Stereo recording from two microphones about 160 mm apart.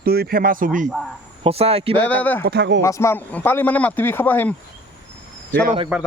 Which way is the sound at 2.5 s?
90° right.